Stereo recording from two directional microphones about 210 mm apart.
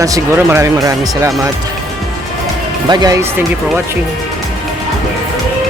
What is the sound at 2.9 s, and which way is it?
Speech, 20° right (ahead or behind).